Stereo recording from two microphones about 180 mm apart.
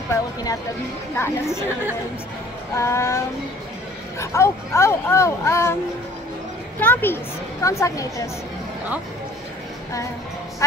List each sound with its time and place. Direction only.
0.1 s a child's voice: 20° left (ahead or behind)
2.7 s a child's voice: 15° left (ahead or behind)
6.8 s a child's voice: 10° left (ahead or behind)